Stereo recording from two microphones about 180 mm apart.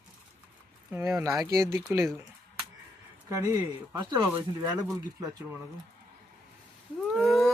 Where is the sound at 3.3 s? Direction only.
20° right (ahead or behind).